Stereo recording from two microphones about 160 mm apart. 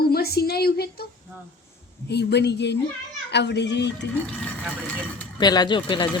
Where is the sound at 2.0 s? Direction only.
90° left.